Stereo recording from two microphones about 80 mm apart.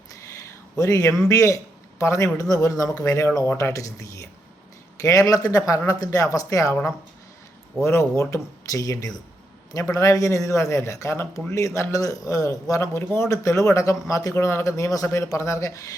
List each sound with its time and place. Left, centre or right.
0.8 s a man's voice: left
7.8 s a man's voice: left